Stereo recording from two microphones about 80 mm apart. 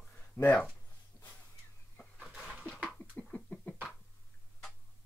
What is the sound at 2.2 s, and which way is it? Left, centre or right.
Dog, centre.